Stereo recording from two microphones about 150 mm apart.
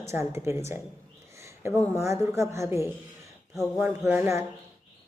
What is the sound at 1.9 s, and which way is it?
A woman's voice, 20° right (ahead or behind).